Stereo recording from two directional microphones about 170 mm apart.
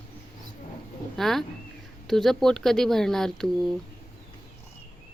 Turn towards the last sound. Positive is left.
turn(degrees=5)  # may be behind; listen again after turning